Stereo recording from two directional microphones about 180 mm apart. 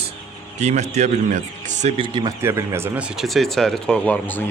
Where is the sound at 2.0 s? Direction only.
25° right (ahead or behind).